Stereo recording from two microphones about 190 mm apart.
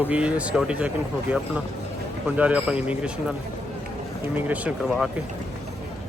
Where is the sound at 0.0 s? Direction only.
5° right (ahead or behind).